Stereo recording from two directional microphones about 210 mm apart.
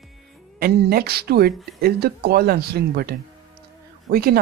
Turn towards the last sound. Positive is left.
turn(degrees=-45)  # may be behind; listen again after turning